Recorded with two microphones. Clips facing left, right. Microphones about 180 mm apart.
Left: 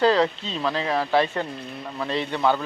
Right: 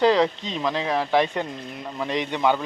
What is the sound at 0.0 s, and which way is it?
Speech, 15° right (ahead or behind).